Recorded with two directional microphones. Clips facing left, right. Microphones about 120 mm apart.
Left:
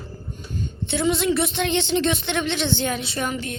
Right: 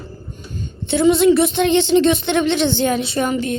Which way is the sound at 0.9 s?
20° right (ahead or behind).